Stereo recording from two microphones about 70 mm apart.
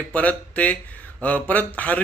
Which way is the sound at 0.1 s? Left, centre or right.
Left.